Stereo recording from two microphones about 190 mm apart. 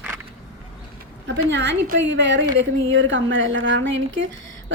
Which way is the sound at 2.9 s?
85° right.